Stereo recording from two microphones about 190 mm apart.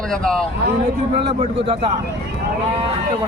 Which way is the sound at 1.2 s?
30° right (ahead or behind).